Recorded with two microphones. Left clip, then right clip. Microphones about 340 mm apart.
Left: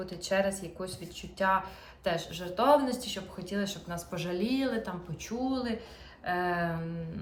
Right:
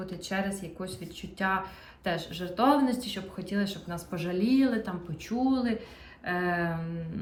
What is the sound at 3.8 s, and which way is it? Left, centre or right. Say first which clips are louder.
Speech: right 1 dB; left.